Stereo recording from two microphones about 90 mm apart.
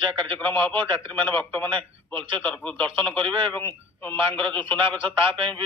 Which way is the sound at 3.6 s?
25° left (ahead or behind).